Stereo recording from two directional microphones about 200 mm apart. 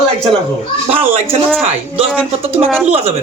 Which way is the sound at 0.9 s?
30° right (ahead or behind).